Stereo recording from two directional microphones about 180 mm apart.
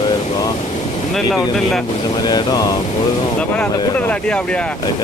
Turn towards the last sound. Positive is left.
turn(degrees=5)  # may be behind; listen again after turning